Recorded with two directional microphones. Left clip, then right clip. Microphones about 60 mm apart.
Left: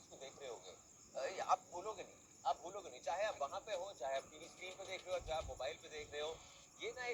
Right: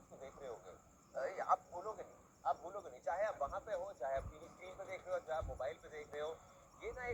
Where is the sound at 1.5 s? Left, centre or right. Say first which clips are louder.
Right 1 dB; centre.